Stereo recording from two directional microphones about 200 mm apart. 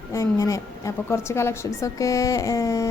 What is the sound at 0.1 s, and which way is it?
A woman's voice, 15° left (ahead or behind).